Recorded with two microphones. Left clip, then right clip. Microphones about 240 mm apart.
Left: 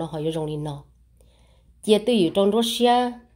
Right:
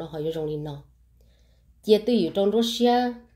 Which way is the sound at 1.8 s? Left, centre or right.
Left.